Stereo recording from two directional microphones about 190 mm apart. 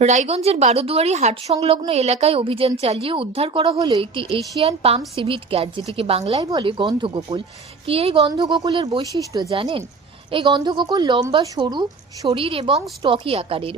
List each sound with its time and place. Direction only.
0.0 s a woman's voice: 35° right (ahead or behind)